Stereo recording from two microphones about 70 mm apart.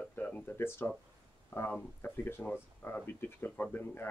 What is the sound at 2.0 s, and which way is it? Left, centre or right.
Speech, left.